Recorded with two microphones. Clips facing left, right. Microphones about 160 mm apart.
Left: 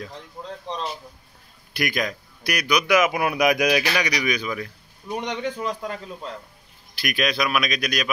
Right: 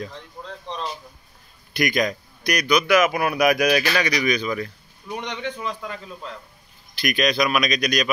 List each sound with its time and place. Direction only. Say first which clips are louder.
1.7 s a man's voice: right 4 dB; 5° left (ahead or behind)
2.9 s speech: left 1 dB; 20° left (ahead or behind)
5.4 s a man's voice: left 2 dB; 40° left (ahead or behind)
7.0 s a man's voice: right 3 dB; 5° left (ahead or behind)